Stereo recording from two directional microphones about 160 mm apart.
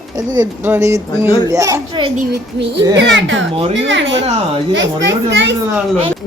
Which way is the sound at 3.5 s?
35° right (ahead or behind).